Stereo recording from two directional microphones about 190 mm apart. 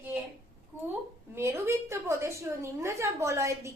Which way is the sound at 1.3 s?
15° right (ahead or behind).